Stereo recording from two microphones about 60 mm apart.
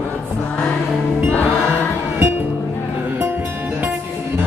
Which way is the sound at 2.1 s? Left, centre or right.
Right.